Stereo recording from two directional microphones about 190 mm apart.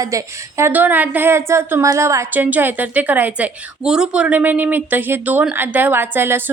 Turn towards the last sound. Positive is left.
turn(degrees=-10)  # may be behind; listen again after turning